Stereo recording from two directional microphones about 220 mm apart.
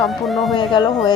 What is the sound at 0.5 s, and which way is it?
Speech, 20° left (ahead or behind).